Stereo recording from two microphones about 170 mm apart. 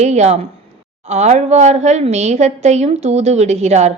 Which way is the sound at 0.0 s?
40° right (ahead or behind).